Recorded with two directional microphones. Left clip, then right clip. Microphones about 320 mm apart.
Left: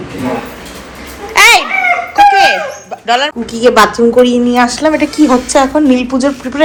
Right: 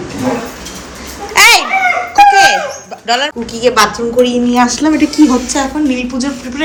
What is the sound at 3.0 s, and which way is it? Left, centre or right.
A woman's voice, centre.